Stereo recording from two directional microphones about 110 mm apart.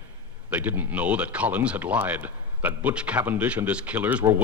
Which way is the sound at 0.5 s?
15° right (ahead or behind).